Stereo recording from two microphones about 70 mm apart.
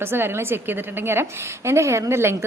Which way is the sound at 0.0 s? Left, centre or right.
Right.